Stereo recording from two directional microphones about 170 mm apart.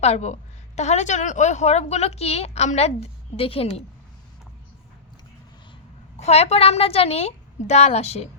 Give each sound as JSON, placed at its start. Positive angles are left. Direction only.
{"t": 0.0, "sound": "a woman's voice", "side_deg": 40}
{"t": 6.1, "sound": "a woman's voice", "side_deg": 40}